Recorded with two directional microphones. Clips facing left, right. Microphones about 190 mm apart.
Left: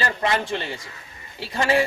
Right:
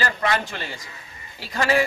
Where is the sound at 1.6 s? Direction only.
25° left (ahead or behind).